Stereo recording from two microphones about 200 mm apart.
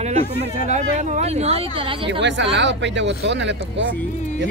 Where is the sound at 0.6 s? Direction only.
35° right (ahead or behind).